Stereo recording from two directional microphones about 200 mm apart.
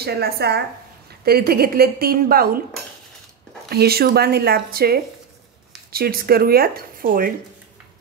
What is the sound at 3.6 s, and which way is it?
A woman's voice, 50° right (ahead or behind).